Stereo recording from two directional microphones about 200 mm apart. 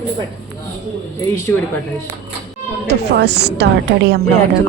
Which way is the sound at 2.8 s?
55° right (ahead or behind).